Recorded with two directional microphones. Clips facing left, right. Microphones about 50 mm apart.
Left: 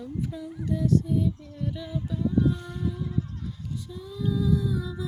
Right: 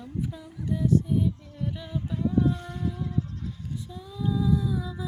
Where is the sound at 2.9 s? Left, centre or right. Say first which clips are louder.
Even; centre.